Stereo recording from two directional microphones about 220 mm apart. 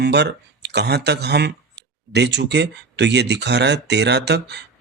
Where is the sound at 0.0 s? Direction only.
50° right (ahead or behind).